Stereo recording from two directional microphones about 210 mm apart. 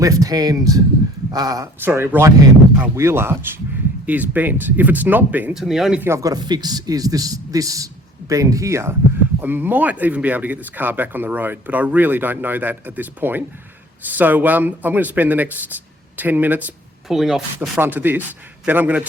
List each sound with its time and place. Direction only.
0.0 s speech: 15° right (ahead or behind)